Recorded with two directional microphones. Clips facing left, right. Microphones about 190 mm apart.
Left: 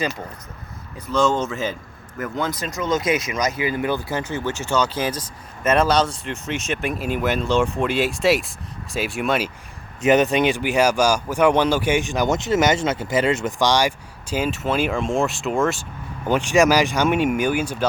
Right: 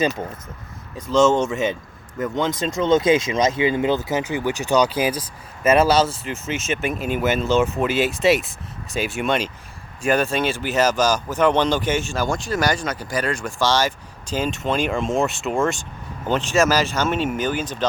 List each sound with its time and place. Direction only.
1.1 s speech: 20° right (ahead or behind); by 9.5 s 5° left (ahead or behind)
10.0 s speech: 20° left (ahead or behind)